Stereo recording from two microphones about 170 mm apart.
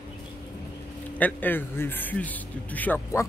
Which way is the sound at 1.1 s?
10° left (ahead or behind).